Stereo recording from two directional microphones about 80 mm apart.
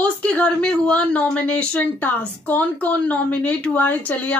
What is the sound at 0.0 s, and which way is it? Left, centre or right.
Speech, centre.